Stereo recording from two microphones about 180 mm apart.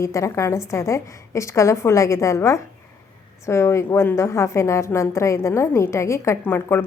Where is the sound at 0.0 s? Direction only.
15° left (ahead or behind).